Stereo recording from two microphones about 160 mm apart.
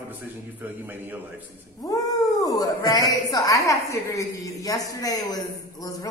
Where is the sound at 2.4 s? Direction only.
20° left (ahead or behind).